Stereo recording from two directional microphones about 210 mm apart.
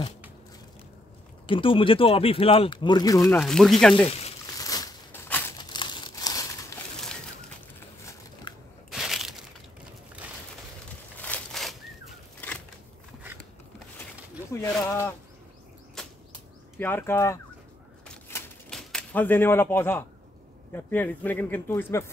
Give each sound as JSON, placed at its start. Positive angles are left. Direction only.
{"t": 1.5, "sound": "speech", "side_deg": 25}
{"t": 3.3, "sound": "speech", "side_deg": 5}
{"t": 4.6, "sound": "crushing", "side_deg": 15}
{"t": 5.6, "sound": "crumpling", "side_deg": 20}
{"t": 8.5, "sound": "a sound", "side_deg": 20}
{"t": 8.9, "sound": "crushing", "side_deg": 0}
{"t": 11.1, "sound": "a sound", "side_deg": 5}
{"t": 14.5, "sound": "a sound", "side_deg": 15}
{"t": 16.0, "sound": "bird flight", "side_deg": 5}
{"t": 16.7, "sound": "speech", "side_deg": 10}
{"t": 18.0, "sound": "a sound", "side_deg": 5}
{"t": 20.7, "sound": "speech", "side_deg": 10}